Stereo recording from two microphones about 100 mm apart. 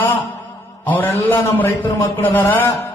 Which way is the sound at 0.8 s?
20° left (ahead or behind).